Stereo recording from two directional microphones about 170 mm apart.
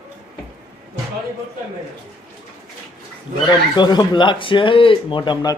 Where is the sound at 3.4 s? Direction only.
25° left (ahead or behind).